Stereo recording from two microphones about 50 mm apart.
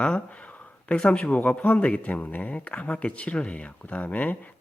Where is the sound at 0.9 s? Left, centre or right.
Centre; by 2.5 s left.